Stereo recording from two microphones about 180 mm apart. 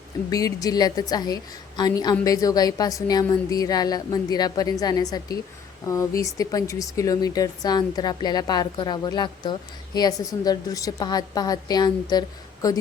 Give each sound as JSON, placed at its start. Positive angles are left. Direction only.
{"t": 0.3, "sound": "speech", "side_deg": 20}